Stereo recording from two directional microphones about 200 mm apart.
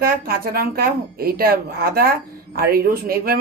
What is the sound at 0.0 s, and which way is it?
Speech, 50° right (ahead or behind).